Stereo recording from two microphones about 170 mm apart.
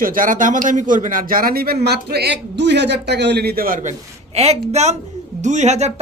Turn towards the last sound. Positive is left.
turn(degrees=-40)  # may be behind; listen again after turning